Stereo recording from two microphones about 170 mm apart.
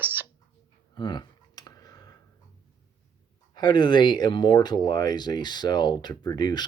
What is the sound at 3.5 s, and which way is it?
Speech, 25° left (ahead or behind).